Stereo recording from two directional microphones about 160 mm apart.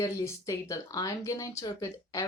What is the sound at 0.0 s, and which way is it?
Speech, 20° left (ahead or behind).